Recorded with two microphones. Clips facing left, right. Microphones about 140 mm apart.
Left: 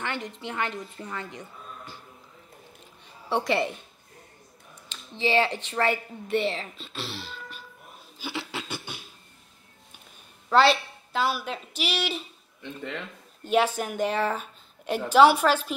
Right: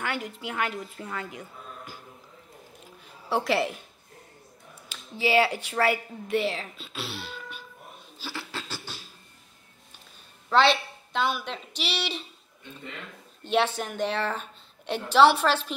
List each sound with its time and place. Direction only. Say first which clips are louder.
0.0 s a woman's voice: right 1 dB; 5° right (ahead or behind)
3.3 s a woman's voice: even; centre (ahead or behind)
4.8 s speech: even; 10° right (ahead or behind)
8.2 s a sound: left 3 dB; 20° left (ahead or behind)
10.5 s a woman's voice: left 1 dB; 5° left (ahead or behind)
13.4 s a woman's voice: left 2 dB; 10° left (ahead or behind)